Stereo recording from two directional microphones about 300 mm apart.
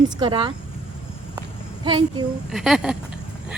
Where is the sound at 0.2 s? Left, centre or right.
Centre.